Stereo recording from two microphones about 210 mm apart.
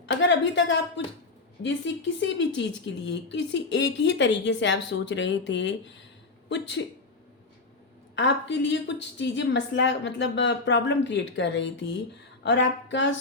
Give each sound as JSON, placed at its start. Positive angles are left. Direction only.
{"t": 0.0, "sound": "a woman's voice", "side_deg": 60}
{"t": 8.1, "sound": "a woman's voice", "side_deg": 55}